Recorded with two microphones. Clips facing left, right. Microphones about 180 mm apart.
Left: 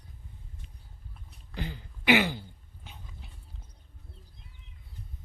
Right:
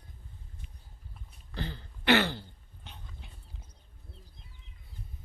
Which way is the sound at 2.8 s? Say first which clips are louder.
Left 1 dB; 5° left (ahead or behind).